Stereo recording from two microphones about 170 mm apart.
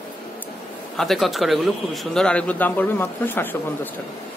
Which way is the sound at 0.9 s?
Centre (ahead or behind).